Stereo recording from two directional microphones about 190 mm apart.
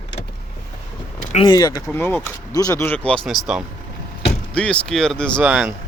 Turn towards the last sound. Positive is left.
turn(degrees=-5)  # may be behind; listen again after turning